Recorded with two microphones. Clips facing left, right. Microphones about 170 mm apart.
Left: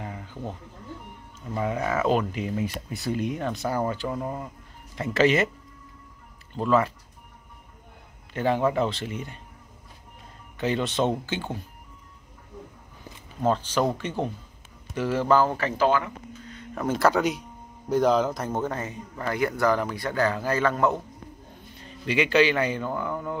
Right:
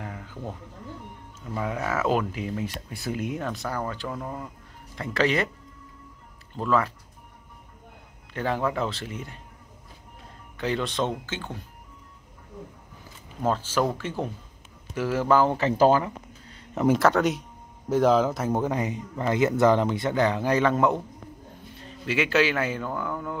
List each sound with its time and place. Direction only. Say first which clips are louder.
0.0 s a sound: left 1 dB; 5° left (ahead or behind)
1.5 s speech: left 2 dB; 5° left (ahead or behind)
3.6 s speech: left 4 dB; 20° left (ahead or behind); by 5.5 s centre (ahead or behind)
6.5 s speech: left 2 dB; centre (ahead or behind)
8.3 s a man's voice: left 3 dB; centre (ahead or behind)
10.6 s speech: left 2 dB; centre (ahead or behind)
13.4 s speech: left 1 dB; 5° right (ahead or behind)
15.8 s a sound: right 3 dB; 35° right (ahead or behind)
16.7 s speech: right 6 dB; 15° right (ahead or behind)
17.0 s speech: even; centre (ahead or behind); by 21.0 s 20° right (ahead or behind)
22.0 s speech: left 2 dB; 5° right (ahead or behind)